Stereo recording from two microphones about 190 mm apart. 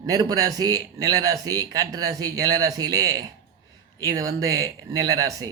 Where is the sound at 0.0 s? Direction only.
20° right (ahead or behind).